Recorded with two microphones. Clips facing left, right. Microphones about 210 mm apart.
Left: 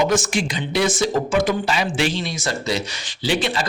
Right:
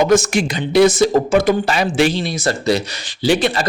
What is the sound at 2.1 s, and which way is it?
Speech, 35° right (ahead or behind).